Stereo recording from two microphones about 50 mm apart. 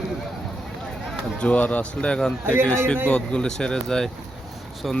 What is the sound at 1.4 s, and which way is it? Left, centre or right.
A man's voice, left.